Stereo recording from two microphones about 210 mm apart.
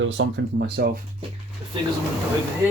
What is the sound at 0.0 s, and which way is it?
Speech, 60° right (ahead or behind).